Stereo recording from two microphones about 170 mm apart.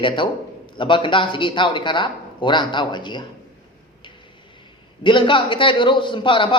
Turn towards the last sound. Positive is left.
turn(degrees=30)  # may be behind; listen again after turning